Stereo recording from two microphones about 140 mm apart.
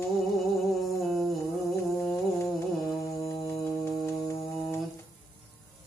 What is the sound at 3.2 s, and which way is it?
Music, 20° left (ahead or behind).